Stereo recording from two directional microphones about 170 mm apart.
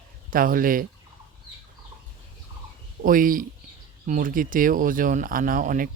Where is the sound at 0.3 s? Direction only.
55° right (ahead or behind).